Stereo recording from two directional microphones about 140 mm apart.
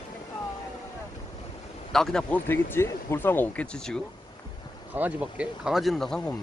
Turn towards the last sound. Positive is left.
turn(degrees=5)  # may be behind; listen again after turning